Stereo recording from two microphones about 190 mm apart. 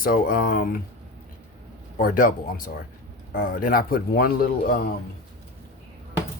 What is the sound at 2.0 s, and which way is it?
Speech, 50° left (ahead or behind).